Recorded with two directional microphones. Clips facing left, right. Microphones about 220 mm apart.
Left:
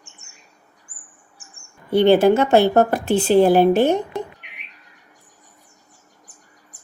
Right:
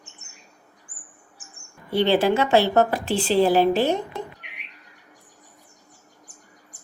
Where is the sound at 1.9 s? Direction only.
55° left (ahead or behind).